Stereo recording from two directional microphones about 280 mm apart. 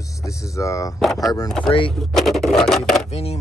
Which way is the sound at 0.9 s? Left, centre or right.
Centre.